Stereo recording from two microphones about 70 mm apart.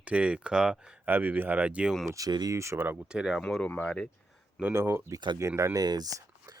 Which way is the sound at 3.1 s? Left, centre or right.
Centre.